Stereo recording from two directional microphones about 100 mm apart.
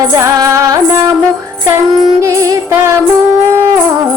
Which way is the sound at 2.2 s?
30° right (ahead or behind).